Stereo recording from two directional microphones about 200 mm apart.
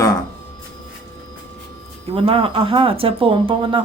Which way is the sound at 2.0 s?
30° right (ahead or behind).